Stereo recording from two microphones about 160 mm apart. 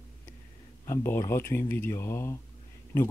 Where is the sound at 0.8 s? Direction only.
15° left (ahead or behind).